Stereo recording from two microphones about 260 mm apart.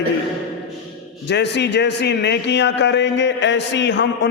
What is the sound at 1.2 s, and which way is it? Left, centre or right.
A man's voice, left.